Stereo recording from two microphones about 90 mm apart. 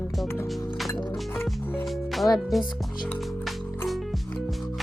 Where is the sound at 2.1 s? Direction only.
Centre (ahead or behind).